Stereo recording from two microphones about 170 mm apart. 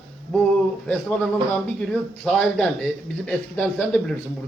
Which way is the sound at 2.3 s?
5° left (ahead or behind).